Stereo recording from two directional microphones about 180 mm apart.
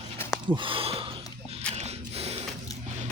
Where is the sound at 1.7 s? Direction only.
35° right (ahead or behind).